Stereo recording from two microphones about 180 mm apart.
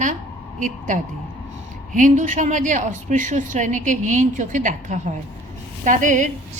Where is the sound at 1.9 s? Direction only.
45° right (ahead or behind).